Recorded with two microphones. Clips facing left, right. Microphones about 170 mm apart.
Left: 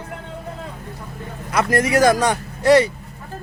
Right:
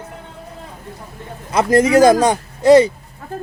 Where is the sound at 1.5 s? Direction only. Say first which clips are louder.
Right 5 dB; 25° right (ahead or behind).